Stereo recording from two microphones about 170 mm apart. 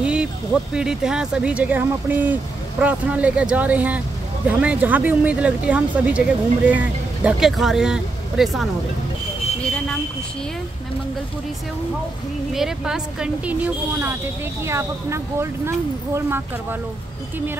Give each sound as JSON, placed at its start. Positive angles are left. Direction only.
{"t": 0.0, "sound": "speech", "side_deg": -5}
{"t": 12.5, "sound": "speech", "side_deg": -5}